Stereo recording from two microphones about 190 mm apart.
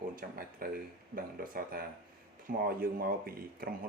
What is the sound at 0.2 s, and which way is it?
Speech, 50° right (ahead or behind).